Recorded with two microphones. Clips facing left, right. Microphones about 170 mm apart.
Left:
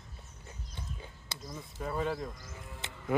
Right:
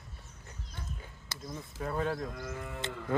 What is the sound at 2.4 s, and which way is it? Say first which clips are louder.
Livestock: right 9 dB; 70° right (ahead or behind).